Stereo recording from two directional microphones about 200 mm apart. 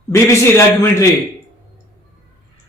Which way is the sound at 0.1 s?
15° left (ahead or behind).